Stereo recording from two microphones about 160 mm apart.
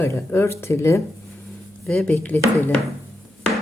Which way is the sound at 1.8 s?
5° left (ahead or behind).